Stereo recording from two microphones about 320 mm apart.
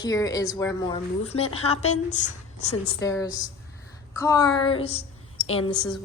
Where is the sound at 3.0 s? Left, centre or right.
Centre.